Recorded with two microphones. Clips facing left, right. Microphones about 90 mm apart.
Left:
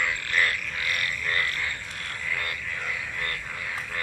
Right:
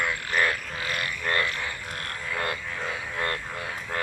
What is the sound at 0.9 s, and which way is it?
Frog, 25° right (ahead or behind).